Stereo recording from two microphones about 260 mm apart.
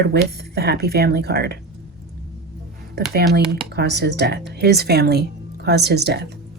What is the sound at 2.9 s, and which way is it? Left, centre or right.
Speech, right.